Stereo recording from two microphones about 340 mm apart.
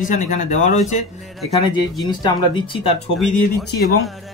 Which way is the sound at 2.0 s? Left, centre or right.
Centre.